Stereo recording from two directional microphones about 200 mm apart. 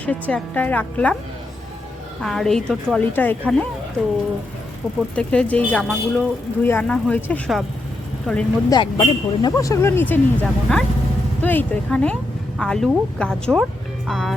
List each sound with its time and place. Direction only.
0.0 s speech: 5° left (ahead or behind)
2.2 s a woman's voice: centre (ahead or behind)
5.1 s a woman's voice: 5° left (ahead or behind)
8.7 s a woman's voice: 20° left (ahead or behind); by 14.3 s centre (ahead or behind)